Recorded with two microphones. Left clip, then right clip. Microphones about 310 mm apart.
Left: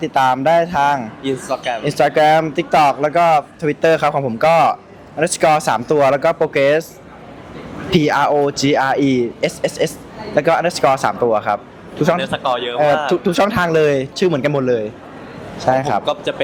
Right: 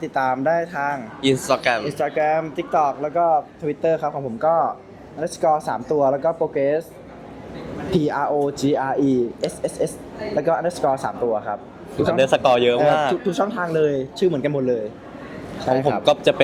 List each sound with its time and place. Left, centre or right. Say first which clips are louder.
0.0 s speech: left 6 dB; centre
1.2 s speech: right 2 dB; right
1.9 s speech: left 8 dB; left
7.9 s speech: left 7 dB; centre
12.2 s speech: right 3 dB; right
13.2 s speech: left 7 dB; left